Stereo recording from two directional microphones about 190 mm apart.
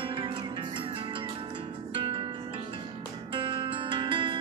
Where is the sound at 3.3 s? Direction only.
25° right (ahead or behind).